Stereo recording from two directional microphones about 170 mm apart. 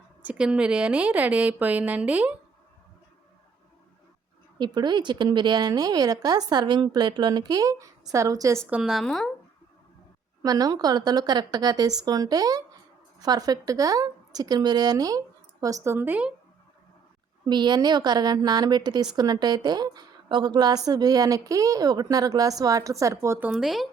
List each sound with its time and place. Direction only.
0.2 s a woman's voice: 5° right (ahead or behind)
4.5 s a woman's voice: 25° right (ahead or behind)
8.7 s a woman's voice: centre (ahead or behind)
10.4 s a woman's voice: 20° right (ahead or behind)
17.4 s a woman's voice: 25° right (ahead or behind)
23.5 s a woman's voice: 5° right (ahead or behind)